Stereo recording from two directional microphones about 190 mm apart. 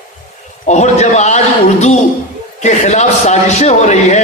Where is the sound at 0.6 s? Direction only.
35° left (ahead or behind).